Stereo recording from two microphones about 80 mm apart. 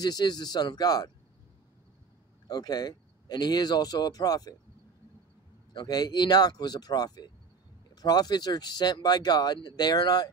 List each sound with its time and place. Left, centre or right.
0.0 s speech: left
2.4 s speech: left
5.7 s speech: left